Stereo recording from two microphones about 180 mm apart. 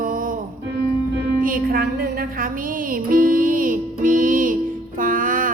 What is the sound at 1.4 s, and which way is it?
Music, 50° right (ahead or behind).